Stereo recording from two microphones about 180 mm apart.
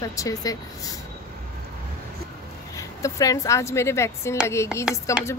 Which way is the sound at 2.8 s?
20° left (ahead or behind).